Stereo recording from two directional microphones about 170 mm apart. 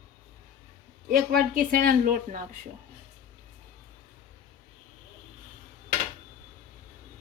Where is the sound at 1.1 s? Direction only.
60° right (ahead or behind).